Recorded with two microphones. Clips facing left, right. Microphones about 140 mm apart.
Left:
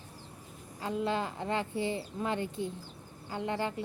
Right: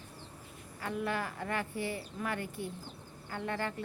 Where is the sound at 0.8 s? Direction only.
20° left (ahead or behind).